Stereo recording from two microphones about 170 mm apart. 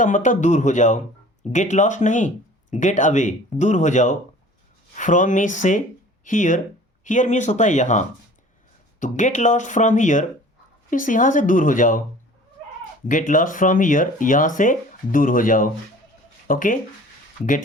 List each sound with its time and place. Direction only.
0.0 s speech: 50° left (ahead or behind)
13.1 s speech: 50° left (ahead or behind)